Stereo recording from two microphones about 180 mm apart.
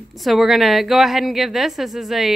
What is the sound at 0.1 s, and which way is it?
Speech, centre (ahead or behind).